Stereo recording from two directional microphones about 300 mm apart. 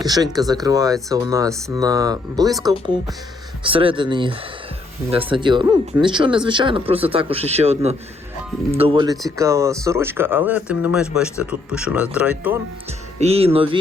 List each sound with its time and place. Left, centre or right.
0.0 s speech: centre
3.6 s speech: centre
13.1 s speech: centre